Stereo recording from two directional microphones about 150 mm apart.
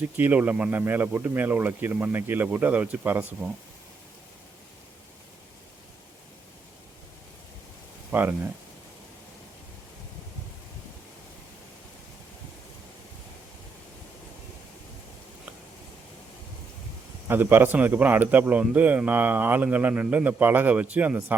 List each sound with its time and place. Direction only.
0.2 s speech: 10° right (ahead or behind)
8.1 s speech: 15° right (ahead or behind)
17.2 s speech: 15° right (ahead or behind)